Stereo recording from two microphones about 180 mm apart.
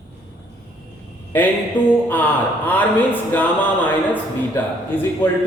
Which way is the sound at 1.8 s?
10° left (ahead or behind).